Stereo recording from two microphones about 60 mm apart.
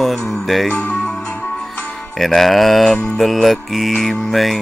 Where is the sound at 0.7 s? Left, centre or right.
Left.